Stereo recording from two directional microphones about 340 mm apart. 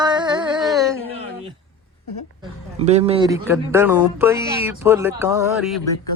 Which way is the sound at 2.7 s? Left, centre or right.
Centre.